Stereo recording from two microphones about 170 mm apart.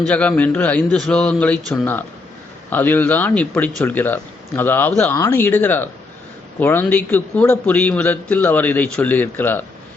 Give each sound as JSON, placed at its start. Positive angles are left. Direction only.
{"t": 0.1, "sound": "a man's voice", "side_deg": 10}